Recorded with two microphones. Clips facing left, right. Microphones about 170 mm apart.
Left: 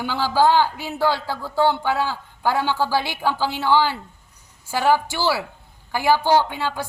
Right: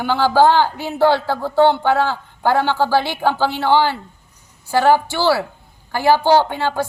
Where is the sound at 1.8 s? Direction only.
60° right (ahead or behind).